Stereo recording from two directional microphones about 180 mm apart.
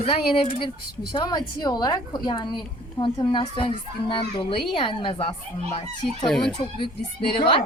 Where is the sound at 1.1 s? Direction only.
25° left (ahead or behind).